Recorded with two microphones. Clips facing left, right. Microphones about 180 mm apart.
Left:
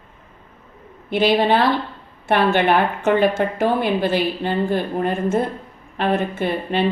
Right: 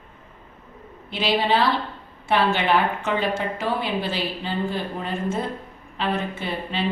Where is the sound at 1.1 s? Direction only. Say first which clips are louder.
Left 5 dB; 55° left (ahead or behind).